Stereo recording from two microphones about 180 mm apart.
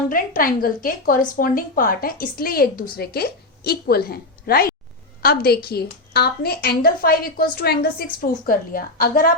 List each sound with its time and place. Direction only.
0.1 s a woman's voice: 50° left (ahead or behind)